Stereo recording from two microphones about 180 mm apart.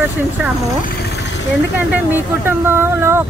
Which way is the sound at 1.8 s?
10° right (ahead or behind).